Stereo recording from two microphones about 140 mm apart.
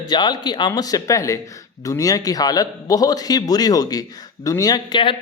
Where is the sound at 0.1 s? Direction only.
30° left (ahead or behind).